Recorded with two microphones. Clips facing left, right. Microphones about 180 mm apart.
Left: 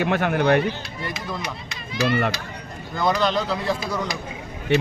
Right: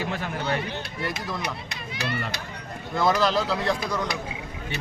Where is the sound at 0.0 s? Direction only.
70° left (ahead or behind).